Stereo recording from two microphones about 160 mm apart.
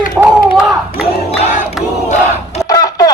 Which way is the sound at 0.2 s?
10° right (ahead or behind).